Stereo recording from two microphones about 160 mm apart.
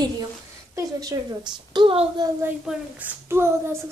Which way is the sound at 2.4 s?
10° right (ahead or behind).